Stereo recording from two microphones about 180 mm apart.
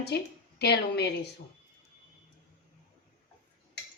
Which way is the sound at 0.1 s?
70° left (ahead or behind).